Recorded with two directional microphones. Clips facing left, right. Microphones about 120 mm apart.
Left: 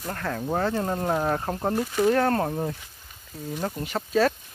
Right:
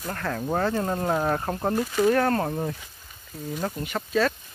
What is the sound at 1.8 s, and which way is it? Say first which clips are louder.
Speech: even; 20° left (ahead or behind).